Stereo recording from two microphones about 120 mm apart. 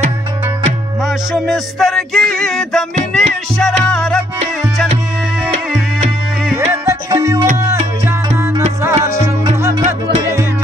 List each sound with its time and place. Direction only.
1.0 s music: centre (ahead or behind)
6.7 s music: 25° right (ahead or behind)
8.8 s music: 25° right (ahead or behind)